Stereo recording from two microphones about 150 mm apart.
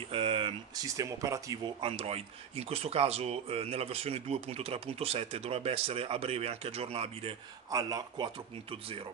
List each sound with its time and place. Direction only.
0.1 s a sound: 35° right (ahead or behind)
0.8 s speech: 20° right (ahead or behind)
1.8 s speech: 40° right (ahead or behind)
7.7 s speech: 25° right (ahead or behind)
8.6 s speech: 40° right (ahead or behind)